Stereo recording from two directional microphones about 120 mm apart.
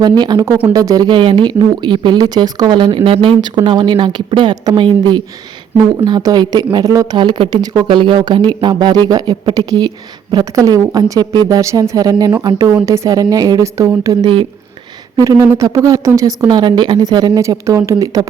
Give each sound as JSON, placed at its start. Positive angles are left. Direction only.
{"t": 0.0, "sound": "a woman's voice", "side_deg": -35}